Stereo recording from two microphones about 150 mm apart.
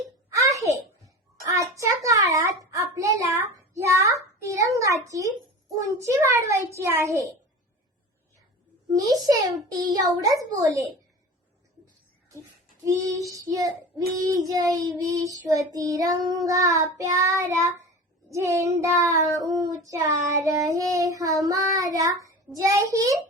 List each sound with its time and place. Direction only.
0.3 s a sound: 20° right (ahead or behind)
5.7 s a child's voice: 20° right (ahead or behind)
9.0 s child singing: 25° right (ahead or behind)
12.8 s child singing: 20° right (ahead or behind)
22.2 s a child's voice: 20° right (ahead or behind)